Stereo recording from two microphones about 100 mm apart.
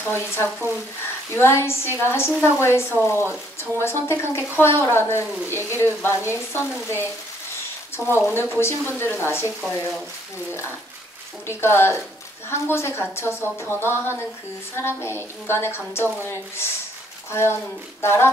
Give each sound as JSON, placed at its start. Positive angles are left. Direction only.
{"t": 0.0, "sound": "a woman's voice", "side_deg": 25}
{"t": 8.0, "sound": "speech", "side_deg": -30}
{"t": 8.5, "sound": "a woman's voice", "side_deg": 25}
{"t": 9.6, "sound": "speech", "side_deg": 0}
{"t": 11.4, "sound": "a woman's voice", "side_deg": 25}